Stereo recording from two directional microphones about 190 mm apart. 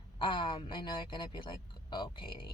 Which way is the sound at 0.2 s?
25° left (ahead or behind).